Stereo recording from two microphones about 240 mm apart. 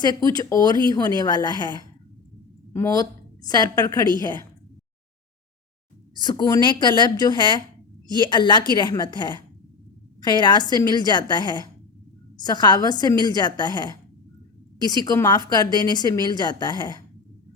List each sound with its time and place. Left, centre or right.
0.0 s a woman's voice: centre
6.2 s a woman's voice: centre